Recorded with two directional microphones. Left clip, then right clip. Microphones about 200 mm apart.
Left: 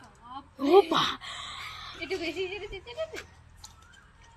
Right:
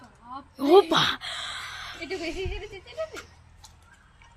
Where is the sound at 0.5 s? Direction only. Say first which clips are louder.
Right 3 dB; 30° right (ahead or behind).